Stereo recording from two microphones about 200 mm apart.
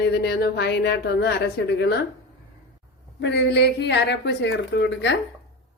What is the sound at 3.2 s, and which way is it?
Speech, 60° left (ahead or behind).